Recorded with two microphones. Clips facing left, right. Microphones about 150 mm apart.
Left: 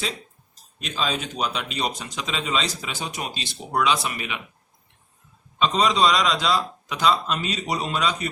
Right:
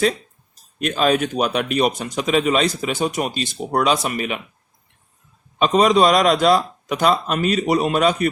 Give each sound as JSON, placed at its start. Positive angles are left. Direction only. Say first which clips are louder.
{"t": 0.8, "sound": "a man's voice", "louder": "right 10 dB", "side_deg": -60}
{"t": 5.5, "sound": "a man's voice", "louder": "right 6 dB", "side_deg": -50}